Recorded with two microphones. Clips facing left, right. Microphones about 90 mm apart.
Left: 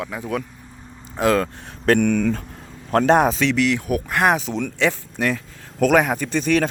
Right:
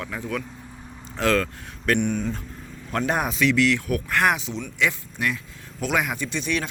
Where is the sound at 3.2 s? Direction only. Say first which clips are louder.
Left 3 dB; 30° left (ahead or behind).